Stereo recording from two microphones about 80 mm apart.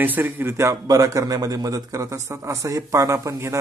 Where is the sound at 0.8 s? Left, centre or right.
Right.